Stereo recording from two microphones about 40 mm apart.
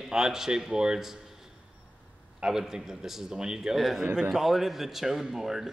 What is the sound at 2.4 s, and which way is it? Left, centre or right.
Speech, centre.